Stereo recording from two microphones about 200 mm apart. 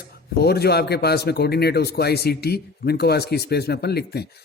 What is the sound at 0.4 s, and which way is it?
A man's voice, 55° left (ahead or behind).